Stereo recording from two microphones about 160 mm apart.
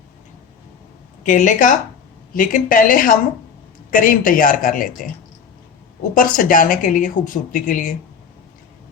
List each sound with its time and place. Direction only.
1.2 s speech: 50° left (ahead or behind)
6.1 s speech: 60° left (ahead or behind)